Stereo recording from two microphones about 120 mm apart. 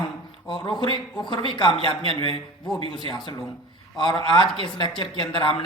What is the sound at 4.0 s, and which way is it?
Speech, 40° left (ahead or behind).